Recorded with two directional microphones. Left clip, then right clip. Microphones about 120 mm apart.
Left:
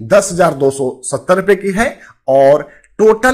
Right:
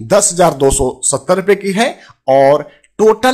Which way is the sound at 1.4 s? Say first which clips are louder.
Even; 15° right (ahead or behind).